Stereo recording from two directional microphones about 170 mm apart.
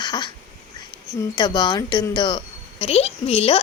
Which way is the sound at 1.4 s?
25° left (ahead or behind).